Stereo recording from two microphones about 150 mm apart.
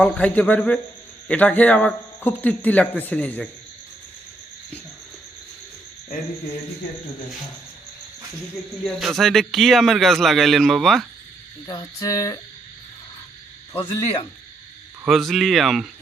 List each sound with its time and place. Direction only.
0.0 s speech: 10° left (ahead or behind)
8.8 s speech: centre (ahead or behind)
11.6 s a sound: 25° left (ahead or behind)
15.0 s speech: centre (ahead or behind)